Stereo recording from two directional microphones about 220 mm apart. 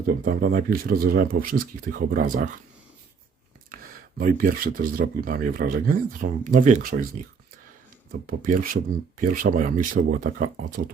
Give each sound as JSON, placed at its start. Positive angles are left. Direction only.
{"t": 0.0, "sound": "speech", "side_deg": -40}
{"t": 3.7, "sound": "speech", "side_deg": -40}
{"t": 8.1, "sound": "speech", "side_deg": -40}